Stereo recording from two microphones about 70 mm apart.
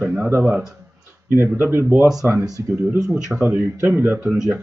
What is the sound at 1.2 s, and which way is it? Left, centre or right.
A man's voice, right.